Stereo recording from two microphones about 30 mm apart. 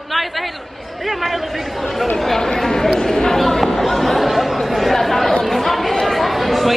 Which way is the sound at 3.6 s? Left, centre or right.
Centre.